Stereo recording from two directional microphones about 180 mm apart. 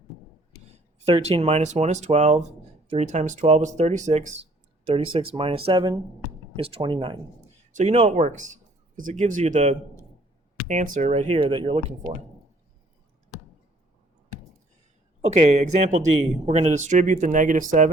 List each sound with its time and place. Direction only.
0.7 s speech: 35° right (ahead or behind)
7.7 s speech: 40° right (ahead or behind)
15.2 s speech: 40° right (ahead or behind)